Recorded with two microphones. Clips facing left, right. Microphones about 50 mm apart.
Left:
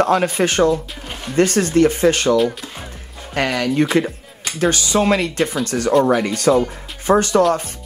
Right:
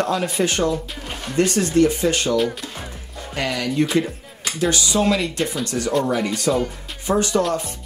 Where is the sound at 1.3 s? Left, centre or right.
Left.